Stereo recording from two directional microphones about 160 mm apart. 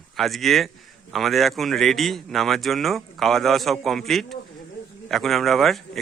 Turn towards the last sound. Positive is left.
turn(degrees=0)  # may be behind; listen again after turning